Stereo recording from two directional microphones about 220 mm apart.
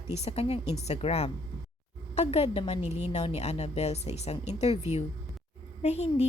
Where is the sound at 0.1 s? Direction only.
30° left (ahead or behind).